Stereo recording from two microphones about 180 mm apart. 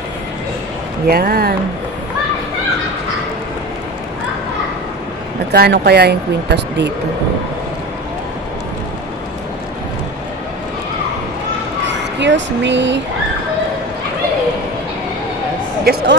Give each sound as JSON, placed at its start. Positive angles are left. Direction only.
{"t": 1.0, "sound": "speech", "side_deg": -60}
{"t": 5.5, "sound": "speech", "side_deg": -65}
{"t": 11.8, "sound": "speech", "side_deg": -80}
{"t": 15.8, "sound": "speech", "side_deg": -60}